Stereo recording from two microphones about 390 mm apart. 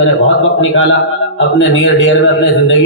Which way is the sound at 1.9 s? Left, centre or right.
Left.